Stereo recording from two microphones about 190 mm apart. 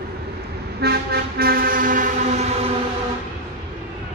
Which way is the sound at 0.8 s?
55° right (ahead or behind).